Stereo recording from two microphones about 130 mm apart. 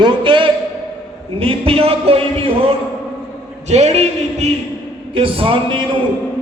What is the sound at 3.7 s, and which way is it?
Speech, 60° right (ahead or behind).